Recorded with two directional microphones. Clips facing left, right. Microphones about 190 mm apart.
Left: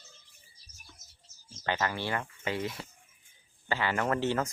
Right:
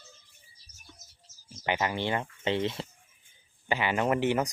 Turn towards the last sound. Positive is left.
turn(degrees=-15)  # may be behind; listen again after turning